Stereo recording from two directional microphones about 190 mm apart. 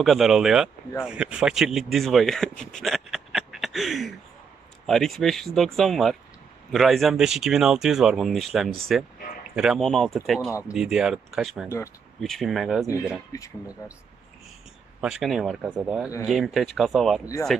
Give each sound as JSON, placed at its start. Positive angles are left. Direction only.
{"t": 0.0, "sound": "speech", "side_deg": 0}
{"t": 12.8, "sound": "speech", "side_deg": -10}
{"t": 13.3, "sound": "speech", "side_deg": 15}
{"t": 15.0, "sound": "speech", "side_deg": 0}